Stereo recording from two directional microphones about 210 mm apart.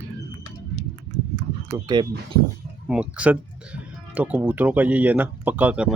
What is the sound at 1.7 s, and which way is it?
Speech, 20° right (ahead or behind).